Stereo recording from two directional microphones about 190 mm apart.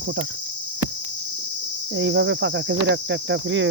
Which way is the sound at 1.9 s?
75° right (ahead or behind).